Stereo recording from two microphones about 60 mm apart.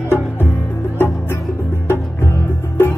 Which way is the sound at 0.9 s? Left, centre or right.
Left.